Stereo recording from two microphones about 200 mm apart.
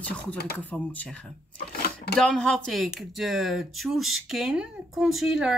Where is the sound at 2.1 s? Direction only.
5° left (ahead or behind).